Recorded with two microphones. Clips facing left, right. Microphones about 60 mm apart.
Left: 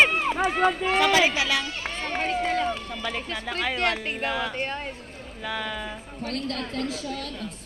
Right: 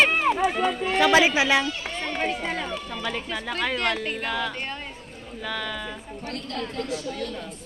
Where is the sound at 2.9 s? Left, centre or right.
Centre.